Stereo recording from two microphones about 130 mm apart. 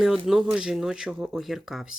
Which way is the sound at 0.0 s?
5° right (ahead or behind).